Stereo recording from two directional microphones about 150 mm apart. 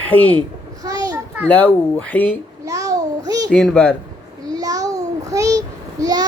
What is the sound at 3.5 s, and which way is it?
Speech, 5° left (ahead or behind).